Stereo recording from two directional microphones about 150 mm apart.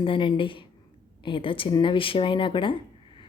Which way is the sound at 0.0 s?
35° left (ahead or behind).